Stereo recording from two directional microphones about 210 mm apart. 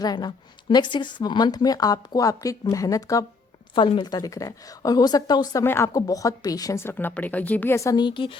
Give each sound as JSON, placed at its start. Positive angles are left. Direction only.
{"t": 0.0, "sound": "a woman's voice", "side_deg": 20}